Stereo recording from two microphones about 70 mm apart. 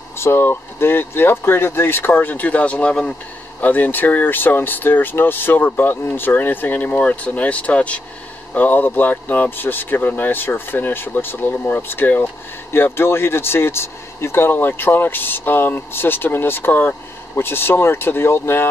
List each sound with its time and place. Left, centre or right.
0.2 s speech: left